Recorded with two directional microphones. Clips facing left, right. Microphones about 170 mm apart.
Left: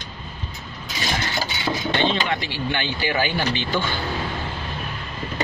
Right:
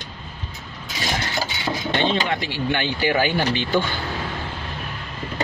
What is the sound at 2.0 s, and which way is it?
Speech, 45° right (ahead or behind).